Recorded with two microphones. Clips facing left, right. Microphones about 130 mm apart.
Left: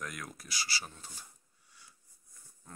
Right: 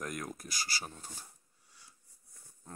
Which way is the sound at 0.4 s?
45° right (ahead or behind).